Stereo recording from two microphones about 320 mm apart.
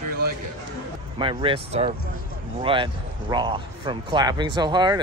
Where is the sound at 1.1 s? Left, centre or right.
Centre.